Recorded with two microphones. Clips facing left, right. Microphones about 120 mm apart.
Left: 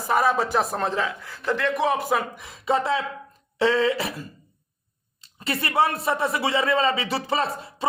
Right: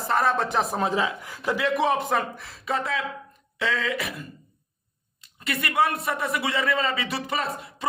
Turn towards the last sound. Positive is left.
turn(degrees=30)  # may be behind; listen again after turning